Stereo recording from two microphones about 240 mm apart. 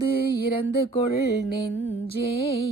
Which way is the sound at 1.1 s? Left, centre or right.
Left.